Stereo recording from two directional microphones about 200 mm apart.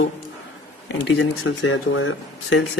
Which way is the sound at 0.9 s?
60° left (ahead or behind).